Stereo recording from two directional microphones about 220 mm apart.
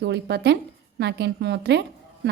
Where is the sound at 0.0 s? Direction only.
50° right (ahead or behind).